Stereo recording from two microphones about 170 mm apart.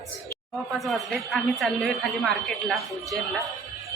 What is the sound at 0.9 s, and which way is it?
A man's voice, centre (ahead or behind).